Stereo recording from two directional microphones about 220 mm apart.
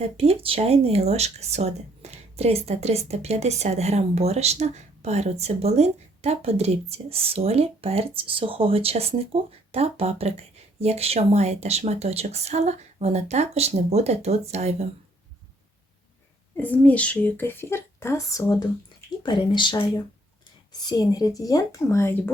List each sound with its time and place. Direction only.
0.0 s speech: 30° right (ahead or behind)
16.6 s speech: 5° left (ahead or behind)